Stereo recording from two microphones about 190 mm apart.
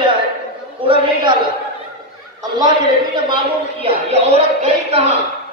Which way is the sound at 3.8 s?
30° right (ahead or behind).